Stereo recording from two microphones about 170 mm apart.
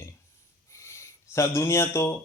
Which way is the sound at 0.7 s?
15° left (ahead or behind).